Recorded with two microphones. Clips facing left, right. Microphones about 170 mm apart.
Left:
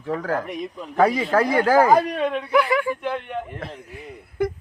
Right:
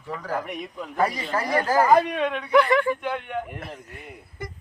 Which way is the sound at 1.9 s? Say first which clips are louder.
Left 1 dB; 5° left (ahead or behind).